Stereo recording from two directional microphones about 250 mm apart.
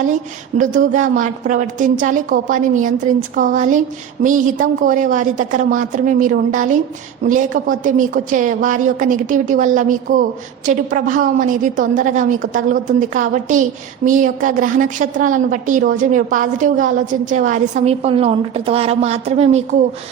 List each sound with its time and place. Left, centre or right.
0.6 s a woman's voice: right